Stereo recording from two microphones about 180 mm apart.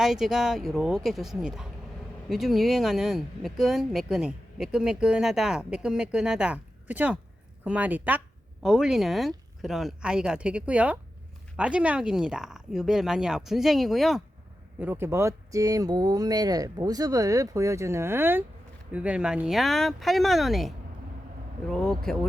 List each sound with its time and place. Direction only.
0.0 s speech: centre (ahead or behind)
14.8 s speech: 10° right (ahead or behind)